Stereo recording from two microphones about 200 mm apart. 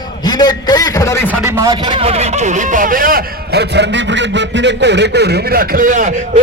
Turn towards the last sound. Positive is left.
turn(degrees=-40)  # may be behind; listen again after turning